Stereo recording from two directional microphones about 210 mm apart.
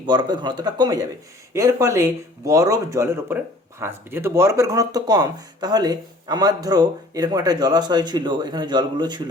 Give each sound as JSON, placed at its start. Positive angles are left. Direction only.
{"t": 0.0, "sound": "speech", "side_deg": -20}